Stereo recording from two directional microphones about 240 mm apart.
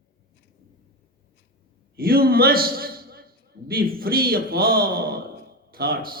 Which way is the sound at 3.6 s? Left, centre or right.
Right.